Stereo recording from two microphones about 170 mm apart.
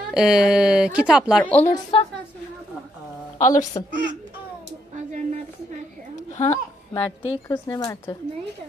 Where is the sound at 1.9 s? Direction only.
30° left (ahead or behind).